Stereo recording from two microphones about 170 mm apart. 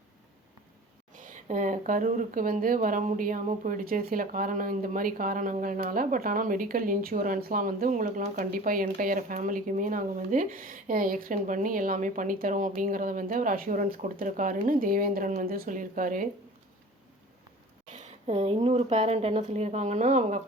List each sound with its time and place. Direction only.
1.2 s speech: 50° right (ahead or behind)
17.9 s a woman's voice: 45° right (ahead or behind)